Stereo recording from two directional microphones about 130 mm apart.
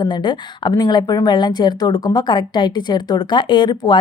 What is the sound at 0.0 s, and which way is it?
Speech, 35° left (ahead or behind).